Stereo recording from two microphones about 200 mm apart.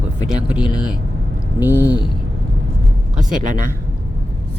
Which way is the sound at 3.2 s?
40° right (ahead or behind).